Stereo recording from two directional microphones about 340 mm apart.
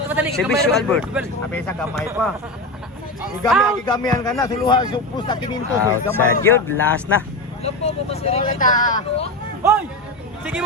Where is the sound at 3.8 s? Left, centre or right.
Centre.